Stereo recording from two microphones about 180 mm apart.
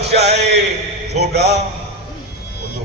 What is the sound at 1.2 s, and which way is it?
Speech, 65° right (ahead or behind).